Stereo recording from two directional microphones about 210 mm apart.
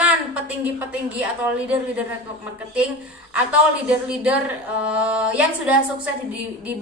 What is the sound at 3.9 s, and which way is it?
A woman's voice, 5° right (ahead or behind).